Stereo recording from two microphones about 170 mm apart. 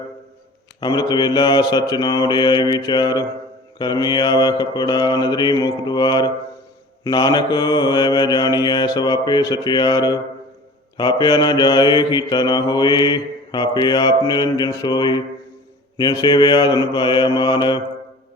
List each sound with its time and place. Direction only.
0.8 s mantra: 25° left (ahead or behind)